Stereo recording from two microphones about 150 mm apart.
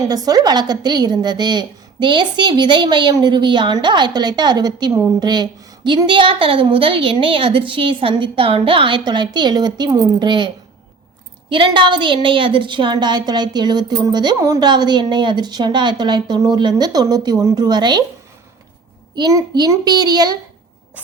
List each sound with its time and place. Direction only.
0.0 s a woman's voice: 25° right (ahead or behind)
19.1 s a woman's voice: 25° right (ahead or behind)